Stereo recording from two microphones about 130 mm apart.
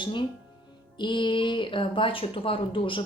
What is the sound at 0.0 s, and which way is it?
A woman's voice, 35° left (ahead or behind).